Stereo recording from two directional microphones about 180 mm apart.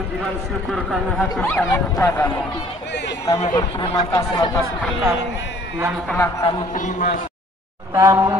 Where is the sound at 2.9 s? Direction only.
70° left (ahead or behind).